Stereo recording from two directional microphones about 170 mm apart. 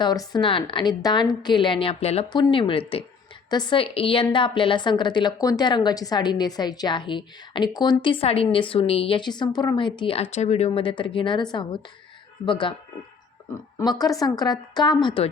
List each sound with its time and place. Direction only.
0.0 s a woman's voice: 25° left (ahead or behind)
13.7 s a woman's voice: 20° left (ahead or behind)